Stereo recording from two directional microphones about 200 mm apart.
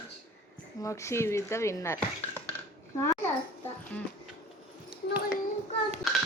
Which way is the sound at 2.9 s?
15° left (ahead or behind).